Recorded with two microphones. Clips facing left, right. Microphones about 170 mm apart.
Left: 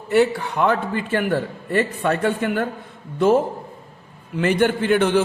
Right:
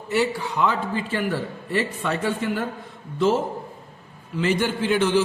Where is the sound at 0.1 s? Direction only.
55° left (ahead or behind).